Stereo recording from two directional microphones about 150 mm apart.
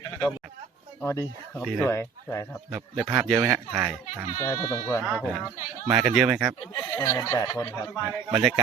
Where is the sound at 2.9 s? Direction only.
Centre (ahead or behind).